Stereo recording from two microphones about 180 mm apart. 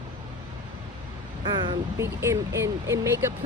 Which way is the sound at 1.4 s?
25° right (ahead or behind).